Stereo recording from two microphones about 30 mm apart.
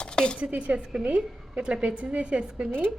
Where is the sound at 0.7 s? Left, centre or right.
Right.